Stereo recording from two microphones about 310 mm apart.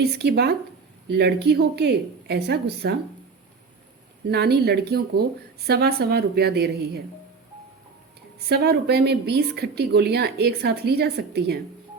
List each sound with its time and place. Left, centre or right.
0.0 s a woman's voice: right
4.3 s a woman's voice: right
8.4 s a woman's voice: right